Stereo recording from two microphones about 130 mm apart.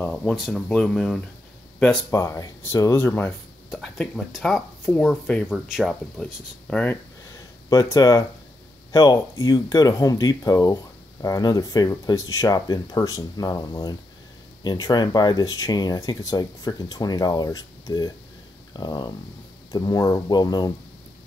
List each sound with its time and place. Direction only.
0.0 s speech: 5° left (ahead or behind)
2.0 s speech: 20° left (ahead or behind)
3.7 s speech: centre (ahead or behind)
6.7 s speech: 10° left (ahead or behind)
7.7 s speech: 25° left (ahead or behind)